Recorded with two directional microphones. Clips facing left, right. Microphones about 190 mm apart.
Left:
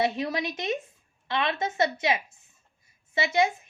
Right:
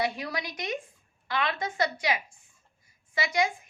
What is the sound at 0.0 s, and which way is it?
A woman's voice, 25° left (ahead or behind).